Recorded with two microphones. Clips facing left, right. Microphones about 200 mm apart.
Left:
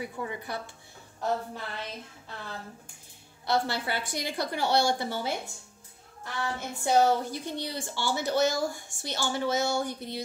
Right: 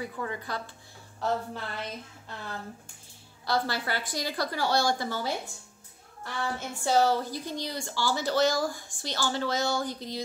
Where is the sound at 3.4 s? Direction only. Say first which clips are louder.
Left 1 dB; 25° left (ahead or behind).